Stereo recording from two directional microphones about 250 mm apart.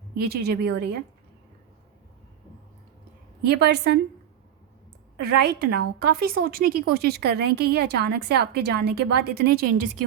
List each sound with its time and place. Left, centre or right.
0.2 s speech: right
3.4 s speech: right
5.2 s speech: right